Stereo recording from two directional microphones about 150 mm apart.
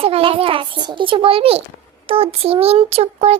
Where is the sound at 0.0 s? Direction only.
40° right (ahead or behind).